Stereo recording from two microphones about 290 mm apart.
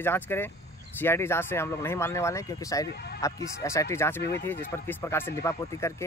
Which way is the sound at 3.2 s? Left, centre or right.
Centre.